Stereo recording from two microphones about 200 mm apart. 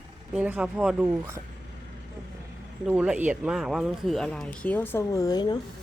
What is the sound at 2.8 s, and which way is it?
Speech, 5° right (ahead or behind).